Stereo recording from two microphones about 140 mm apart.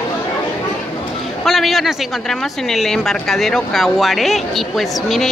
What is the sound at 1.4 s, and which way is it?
Speech, centre (ahead or behind).